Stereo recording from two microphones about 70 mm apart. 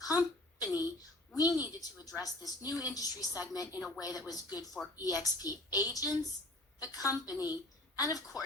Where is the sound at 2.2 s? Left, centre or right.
Left.